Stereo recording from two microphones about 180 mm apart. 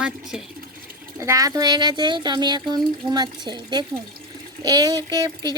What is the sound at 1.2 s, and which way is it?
Speech, 20° right (ahead or behind).